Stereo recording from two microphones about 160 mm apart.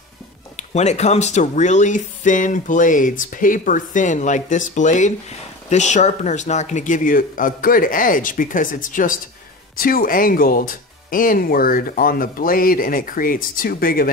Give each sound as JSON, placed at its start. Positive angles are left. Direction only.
{"t": 0.6, "sound": "speech", "side_deg": 45}